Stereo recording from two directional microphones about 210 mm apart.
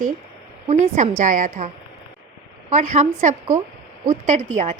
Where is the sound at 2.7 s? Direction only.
35° right (ahead or behind).